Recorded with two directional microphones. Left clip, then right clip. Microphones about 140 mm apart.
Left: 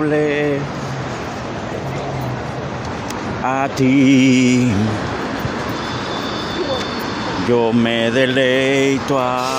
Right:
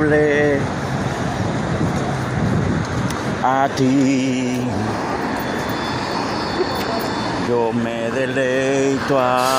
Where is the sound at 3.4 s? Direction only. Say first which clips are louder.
Right 2 dB; 25° left (ahead or behind).